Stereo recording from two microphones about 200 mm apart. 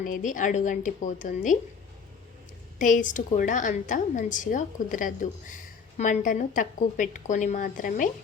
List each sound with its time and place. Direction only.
0.0 s a woman's voice: 40° left (ahead or behind)
2.7 s a woman's voice: 40° left (ahead or behind)